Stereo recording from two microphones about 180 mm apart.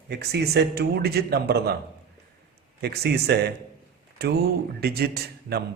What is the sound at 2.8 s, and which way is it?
Speech, 65° right (ahead or behind).